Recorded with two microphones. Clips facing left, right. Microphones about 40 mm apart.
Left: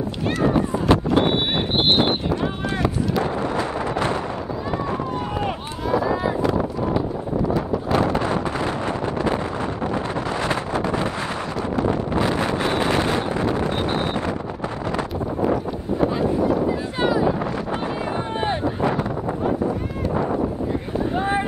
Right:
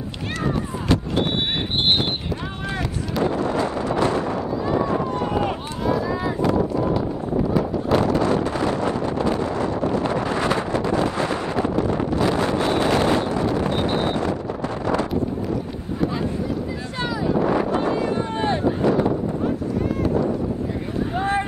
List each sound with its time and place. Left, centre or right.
0.4 s a sound: centre
5.9 s a sound: centre
8.0 s wind noise: left
11.9 s wind noise: left
12.5 s wind noise: centre
13.8 s wind noise: centre
17.0 s wind noise: centre
17.7 s a sound: centre
18.9 s wind noise: centre
21.2 s boat: centre